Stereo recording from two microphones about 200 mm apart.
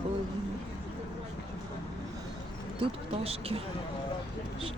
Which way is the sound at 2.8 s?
30° right (ahead or behind).